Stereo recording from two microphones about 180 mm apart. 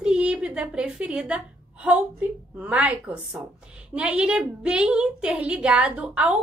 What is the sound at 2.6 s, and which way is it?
A woman's voice, 10° right (ahead or behind).